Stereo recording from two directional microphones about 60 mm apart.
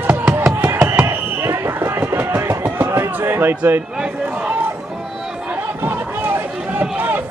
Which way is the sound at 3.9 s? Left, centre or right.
Centre.